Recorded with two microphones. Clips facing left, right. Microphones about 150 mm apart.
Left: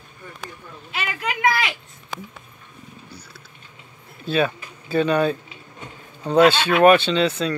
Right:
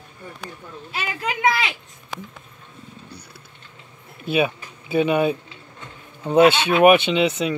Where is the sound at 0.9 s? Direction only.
30° right (ahead or behind).